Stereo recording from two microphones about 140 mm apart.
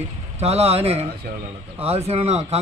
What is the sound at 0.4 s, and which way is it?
A man's voice, 50° right (ahead or behind).